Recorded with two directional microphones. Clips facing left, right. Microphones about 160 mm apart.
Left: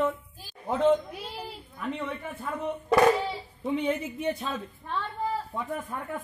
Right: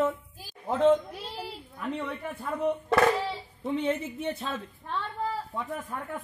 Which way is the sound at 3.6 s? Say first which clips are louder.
Left 1 dB; 5° left (ahead or behind).